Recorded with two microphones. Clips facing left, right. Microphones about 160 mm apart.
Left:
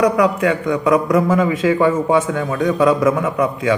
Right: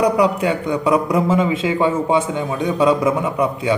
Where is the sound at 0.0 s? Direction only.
30° right (ahead or behind).